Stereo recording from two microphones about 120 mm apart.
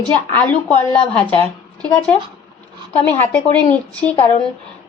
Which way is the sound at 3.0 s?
10° left (ahead or behind).